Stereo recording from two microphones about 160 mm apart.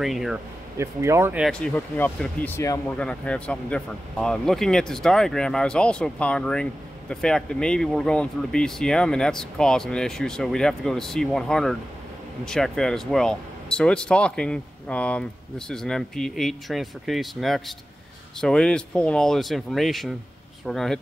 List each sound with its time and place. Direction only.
0.0 s speech: centre (ahead or behind)
0.7 s speech: 15° right (ahead or behind)
1.4 s speech: 5° left (ahead or behind)
3.0 s speech: 5° left (ahead or behind)